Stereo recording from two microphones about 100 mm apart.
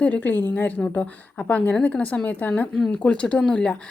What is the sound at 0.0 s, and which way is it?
Speech, 15° left (ahead or behind).